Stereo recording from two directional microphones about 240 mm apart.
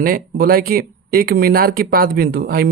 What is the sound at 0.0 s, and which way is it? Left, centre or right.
Speech, right.